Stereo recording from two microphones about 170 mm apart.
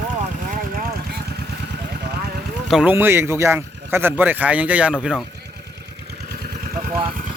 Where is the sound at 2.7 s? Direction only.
10° right (ahead or behind).